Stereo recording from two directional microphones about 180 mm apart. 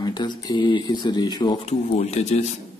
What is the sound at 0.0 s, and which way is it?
Speech, 25° left (ahead or behind).